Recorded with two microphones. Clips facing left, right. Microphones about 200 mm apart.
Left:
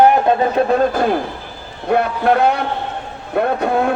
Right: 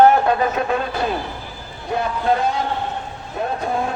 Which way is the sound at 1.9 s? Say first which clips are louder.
Left 5 dB; 65° left (ahead or behind).